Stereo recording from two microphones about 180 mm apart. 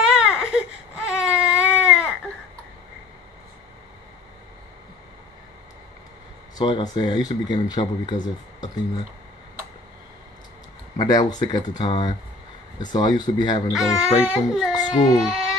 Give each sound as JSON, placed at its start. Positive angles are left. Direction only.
{"t": 0.0, "sound": "baby cry", "side_deg": -5}
{"t": 6.6, "sound": "speech", "side_deg": 25}
{"t": 11.0, "sound": "speech", "side_deg": 20}
{"t": 13.7, "sound": "speech", "side_deg": -5}